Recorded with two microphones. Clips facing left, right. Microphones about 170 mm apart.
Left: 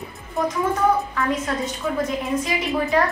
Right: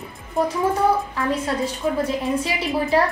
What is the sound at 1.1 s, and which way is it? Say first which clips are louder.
A woman's voice: right 1 dB; 30° right (ahead or behind).